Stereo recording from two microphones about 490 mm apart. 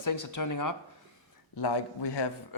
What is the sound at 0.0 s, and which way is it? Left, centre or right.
Speech, left.